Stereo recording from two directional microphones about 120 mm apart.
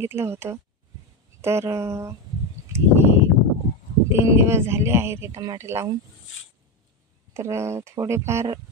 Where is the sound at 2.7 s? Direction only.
20° right (ahead or behind).